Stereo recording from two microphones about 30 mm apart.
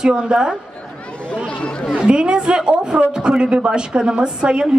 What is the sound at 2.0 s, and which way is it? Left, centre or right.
A man's voice, right.